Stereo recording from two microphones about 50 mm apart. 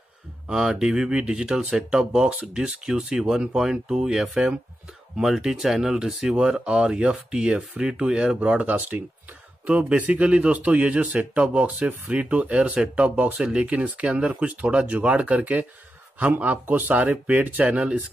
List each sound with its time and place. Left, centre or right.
0.5 s speech: centre